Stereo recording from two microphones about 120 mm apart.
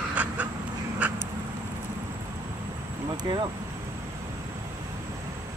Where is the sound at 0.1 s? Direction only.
10° right (ahead or behind).